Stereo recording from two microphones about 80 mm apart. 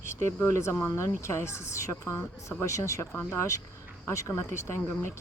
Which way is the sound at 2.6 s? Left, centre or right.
Left.